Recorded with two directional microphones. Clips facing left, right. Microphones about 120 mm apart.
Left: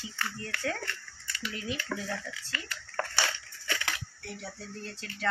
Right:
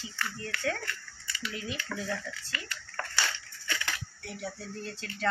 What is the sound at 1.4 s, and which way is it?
Speech, 5° left (ahead or behind).